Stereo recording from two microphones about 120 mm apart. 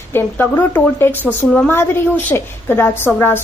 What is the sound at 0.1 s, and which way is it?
A woman's voice, 20° left (ahead or behind).